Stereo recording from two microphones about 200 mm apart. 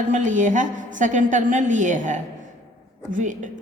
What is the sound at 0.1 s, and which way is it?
A woman's voice, 40° right (ahead or behind).